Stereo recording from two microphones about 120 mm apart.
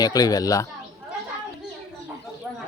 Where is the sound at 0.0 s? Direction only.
30° left (ahead or behind).